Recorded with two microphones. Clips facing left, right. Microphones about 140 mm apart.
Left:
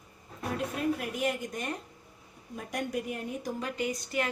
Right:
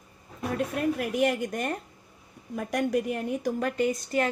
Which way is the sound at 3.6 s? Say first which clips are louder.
Right 7 dB; 50° right (ahead or behind).